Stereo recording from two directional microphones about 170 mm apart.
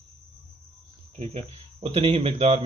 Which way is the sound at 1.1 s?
35° right (ahead or behind).